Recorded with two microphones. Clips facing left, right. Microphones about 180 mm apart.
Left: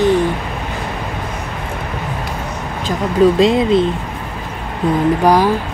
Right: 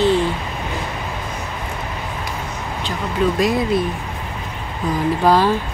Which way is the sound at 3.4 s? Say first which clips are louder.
Left 6 dB; 25° left (ahead or behind).